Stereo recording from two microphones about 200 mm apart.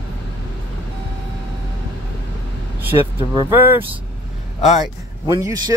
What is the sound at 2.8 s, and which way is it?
Speech, 15° right (ahead or behind).